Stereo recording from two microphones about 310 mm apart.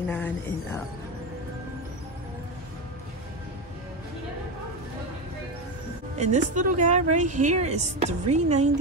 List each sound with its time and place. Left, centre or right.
0.1 s speech: centre
6.1 s a woman's voice: right